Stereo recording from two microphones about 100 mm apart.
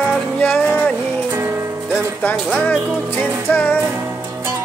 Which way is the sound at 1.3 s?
25° right (ahead or behind).